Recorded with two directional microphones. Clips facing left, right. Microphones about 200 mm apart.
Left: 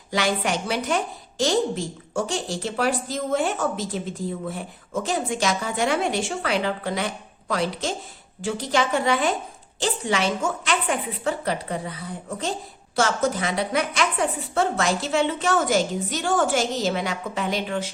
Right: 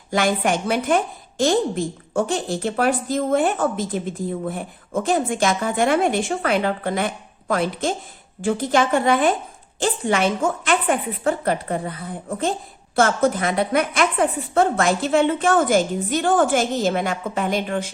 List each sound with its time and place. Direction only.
0.1 s a woman's voice: 50° right (ahead or behind)
5.0 s a woman's voice: 50° right (ahead or behind)